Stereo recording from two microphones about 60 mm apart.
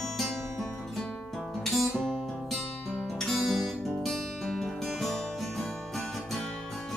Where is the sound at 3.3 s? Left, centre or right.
Centre.